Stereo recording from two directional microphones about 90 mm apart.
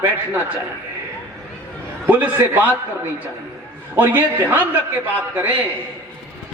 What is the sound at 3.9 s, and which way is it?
Speech, 20° right (ahead or behind).